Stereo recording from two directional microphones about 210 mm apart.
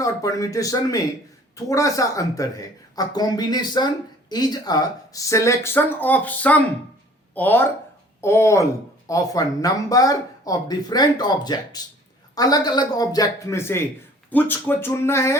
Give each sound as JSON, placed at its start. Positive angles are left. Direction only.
{"t": 0.0, "sound": "speech", "side_deg": 15}